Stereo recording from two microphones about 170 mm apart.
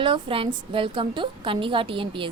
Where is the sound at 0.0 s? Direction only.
30° right (ahead or behind).